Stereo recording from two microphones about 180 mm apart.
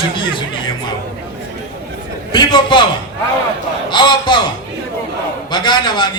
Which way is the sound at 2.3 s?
25° left (ahead or behind).